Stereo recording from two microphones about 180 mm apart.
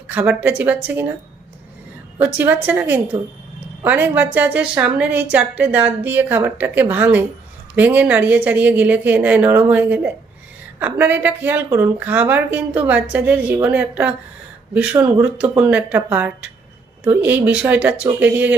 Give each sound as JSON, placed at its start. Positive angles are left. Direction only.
{"t": 0.1, "sound": "a woman's voice", "side_deg": -10}
{"t": 2.1, "sound": "a woman's voice", "side_deg": -10}